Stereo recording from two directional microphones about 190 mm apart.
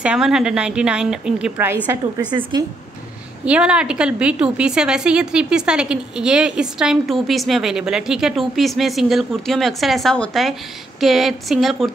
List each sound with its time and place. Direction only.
0.0 s a woman's voice: 5° right (ahead or behind)
2.5 s speech: 20° right (ahead or behind)
3.4 s a woman's voice: 5° right (ahead or behind)